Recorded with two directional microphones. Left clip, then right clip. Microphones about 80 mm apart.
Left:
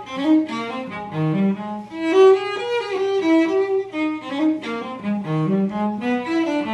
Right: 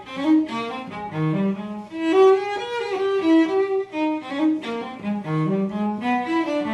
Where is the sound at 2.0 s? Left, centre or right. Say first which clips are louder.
Left 2 dB; left.